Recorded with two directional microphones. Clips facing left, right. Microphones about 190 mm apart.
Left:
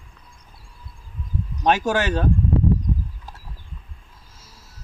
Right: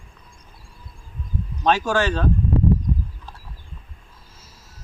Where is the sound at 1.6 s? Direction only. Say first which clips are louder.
Even; 15° left (ahead or behind).